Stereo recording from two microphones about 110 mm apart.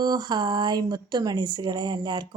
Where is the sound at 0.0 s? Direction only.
40° right (ahead or behind).